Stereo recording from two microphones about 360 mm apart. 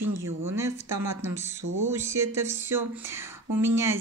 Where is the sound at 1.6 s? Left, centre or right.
Right.